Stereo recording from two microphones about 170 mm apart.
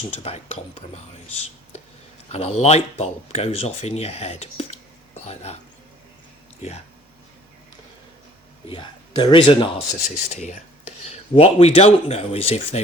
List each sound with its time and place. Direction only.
0.2 s speech: 35° left (ahead or behind)
2.3 s speech: 40° left (ahead or behind)
8.6 s a man's voice: 30° left (ahead or behind)
10.0 s speech: 45° left (ahead or behind)